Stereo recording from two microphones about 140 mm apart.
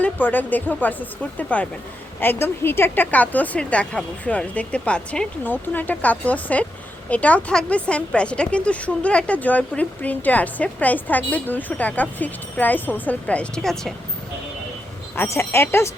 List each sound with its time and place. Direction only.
0.0 s speech: 15° left (ahead or behind)
15.1 s speech: 15° left (ahead or behind)